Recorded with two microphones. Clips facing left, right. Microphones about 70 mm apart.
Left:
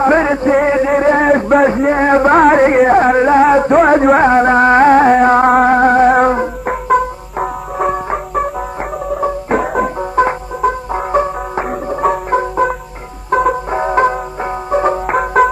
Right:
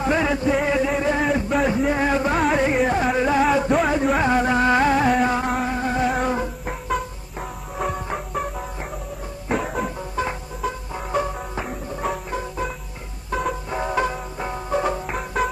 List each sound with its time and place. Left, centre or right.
0.0 s music: left
0.9 s a sound: left
1.8 s music: left
3.7 s music: left
4.3 s music: left
6.3 s music: left
6.7 s music: left
12.0 s music: left
13.7 s music: left
15.0 s music: left